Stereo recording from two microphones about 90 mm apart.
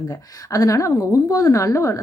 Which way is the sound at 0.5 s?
35° left (ahead or behind).